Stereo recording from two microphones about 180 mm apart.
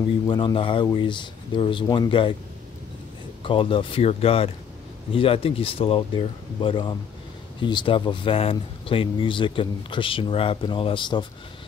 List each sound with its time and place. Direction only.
0.3 s speech: 25° left (ahead or behind)
3.4 s speech: 30° left (ahead or behind)